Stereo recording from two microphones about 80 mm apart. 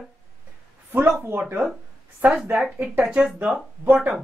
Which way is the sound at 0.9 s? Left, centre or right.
Right.